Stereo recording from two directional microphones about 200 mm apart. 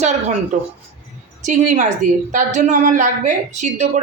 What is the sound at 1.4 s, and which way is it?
A woman's voice, 35° right (ahead or behind).